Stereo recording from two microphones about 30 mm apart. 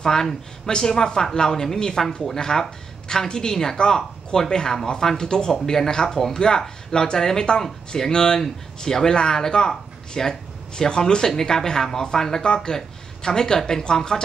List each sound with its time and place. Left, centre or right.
0.0 s speech: centre